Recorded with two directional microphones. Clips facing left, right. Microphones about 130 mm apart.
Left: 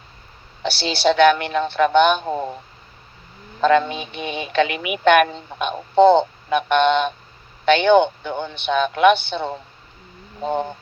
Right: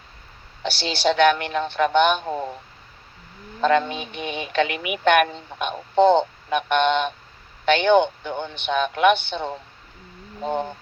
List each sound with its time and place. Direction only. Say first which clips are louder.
0.6 s speech: left 3 dB; 90° left
3.6 s speech: left 3 dB; 90° left